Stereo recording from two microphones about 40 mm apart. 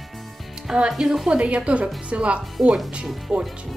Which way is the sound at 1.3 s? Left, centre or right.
Right.